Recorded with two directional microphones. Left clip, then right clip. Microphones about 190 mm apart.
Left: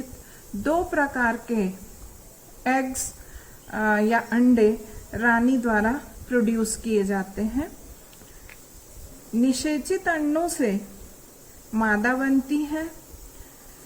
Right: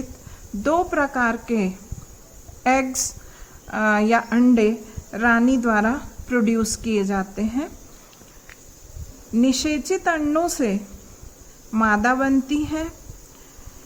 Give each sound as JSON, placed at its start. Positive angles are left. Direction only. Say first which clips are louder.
{"t": 0.6, "sound": "a woman's voice", "louder": "right 3 dB", "side_deg": -35}
{"t": 9.4, "sound": "a woman's voice", "louder": "right 3 dB", "side_deg": -35}